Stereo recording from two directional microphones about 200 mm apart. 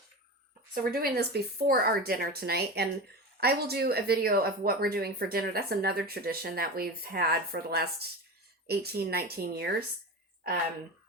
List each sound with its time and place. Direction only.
0.7 s speech: 45° right (ahead or behind)